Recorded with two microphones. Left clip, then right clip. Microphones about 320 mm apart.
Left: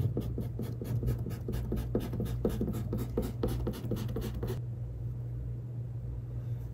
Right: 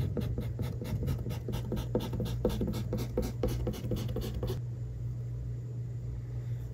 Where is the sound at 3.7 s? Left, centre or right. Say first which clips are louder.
Right 1 dB; right.